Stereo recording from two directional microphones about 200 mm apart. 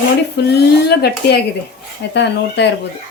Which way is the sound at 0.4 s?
55° left (ahead or behind).